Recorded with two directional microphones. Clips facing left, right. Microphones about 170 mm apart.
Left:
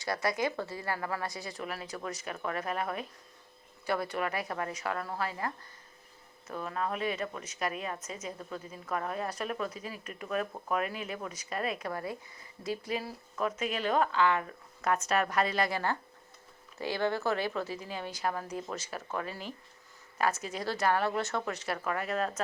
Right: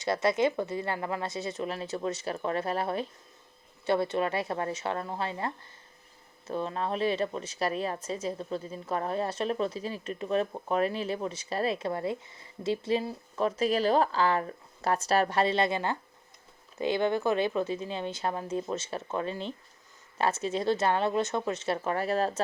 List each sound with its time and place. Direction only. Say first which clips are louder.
0.0 s speech: right 5 dB; 25° right (ahead or behind)